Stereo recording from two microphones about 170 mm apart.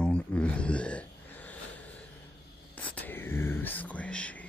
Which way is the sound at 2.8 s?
10° left (ahead or behind).